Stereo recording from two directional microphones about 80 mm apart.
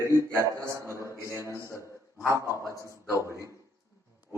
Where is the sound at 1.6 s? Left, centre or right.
Left.